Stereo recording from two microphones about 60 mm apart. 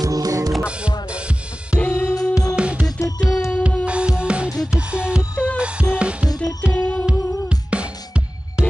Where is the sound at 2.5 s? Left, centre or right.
Centre.